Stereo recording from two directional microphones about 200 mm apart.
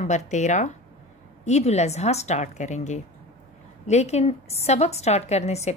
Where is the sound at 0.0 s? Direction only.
35° left (ahead or behind).